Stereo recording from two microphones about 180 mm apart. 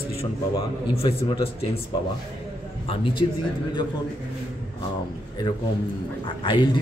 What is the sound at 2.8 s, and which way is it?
Speech, 30° left (ahead or behind).